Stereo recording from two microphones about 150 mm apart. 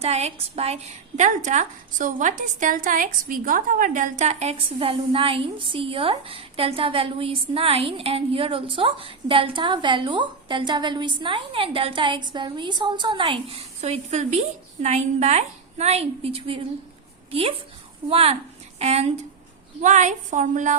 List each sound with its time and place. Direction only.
0.0 s a woman's voice: 45° right (ahead or behind)
18.1 s a woman's voice: 40° right (ahead or behind); by 20.7 s 55° right (ahead or behind)